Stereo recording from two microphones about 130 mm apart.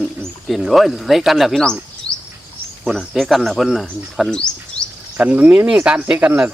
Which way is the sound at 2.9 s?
Centre (ahead or behind).